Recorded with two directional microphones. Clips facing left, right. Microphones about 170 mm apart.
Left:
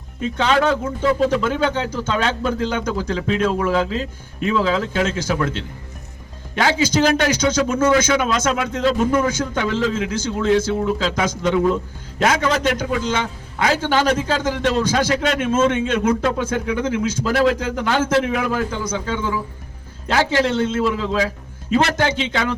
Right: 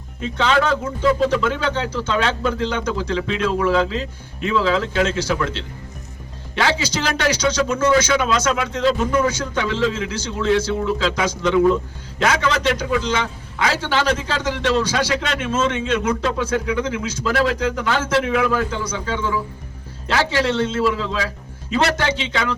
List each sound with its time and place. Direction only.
0.2 s a man's voice: 50° left (ahead or behind)